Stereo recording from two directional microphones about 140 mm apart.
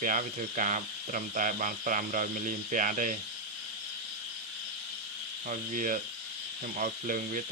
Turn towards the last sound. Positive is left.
turn(degrees=-70)  # may be behind; listen again after turning